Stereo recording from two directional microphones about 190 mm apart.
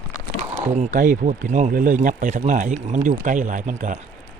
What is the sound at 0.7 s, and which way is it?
Speech, 40° right (ahead or behind).